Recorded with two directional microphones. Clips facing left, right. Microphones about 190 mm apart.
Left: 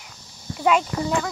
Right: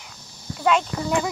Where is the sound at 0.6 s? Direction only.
5° left (ahead or behind).